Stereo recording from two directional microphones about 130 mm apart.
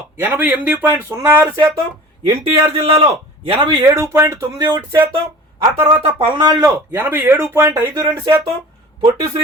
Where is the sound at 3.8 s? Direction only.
25° right (ahead or behind).